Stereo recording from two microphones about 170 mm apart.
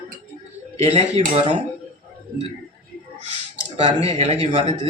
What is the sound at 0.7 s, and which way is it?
Speech, 35° right (ahead or behind).